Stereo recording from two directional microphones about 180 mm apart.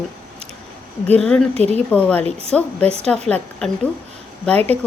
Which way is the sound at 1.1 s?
5° left (ahead or behind).